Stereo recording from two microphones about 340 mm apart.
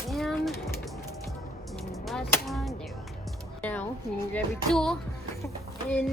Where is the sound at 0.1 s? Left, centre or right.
Centre.